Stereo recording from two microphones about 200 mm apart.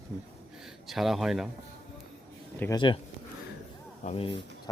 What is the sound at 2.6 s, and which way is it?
Speech, 20° left (ahead or behind).